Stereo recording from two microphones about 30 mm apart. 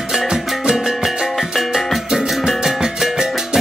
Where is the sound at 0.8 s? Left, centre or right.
Centre.